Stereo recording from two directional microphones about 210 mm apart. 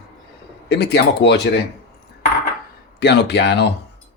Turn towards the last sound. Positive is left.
turn(degrees=55)  # may be behind; listen again after turning